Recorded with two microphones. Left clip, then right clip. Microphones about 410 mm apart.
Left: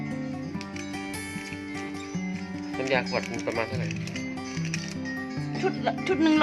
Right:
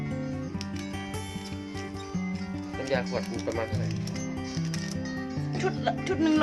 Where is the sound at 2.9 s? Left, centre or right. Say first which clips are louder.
Left 3 dB; centre.